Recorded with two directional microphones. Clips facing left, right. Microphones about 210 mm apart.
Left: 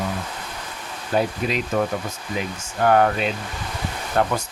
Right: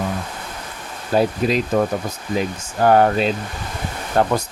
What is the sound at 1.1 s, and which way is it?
Speech, 35° right (ahead or behind).